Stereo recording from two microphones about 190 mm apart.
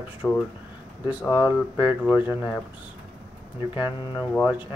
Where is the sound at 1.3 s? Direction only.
25° left (ahead or behind).